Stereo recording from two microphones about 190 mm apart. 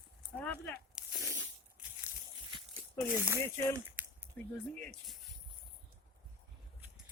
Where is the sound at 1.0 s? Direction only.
5° right (ahead or behind).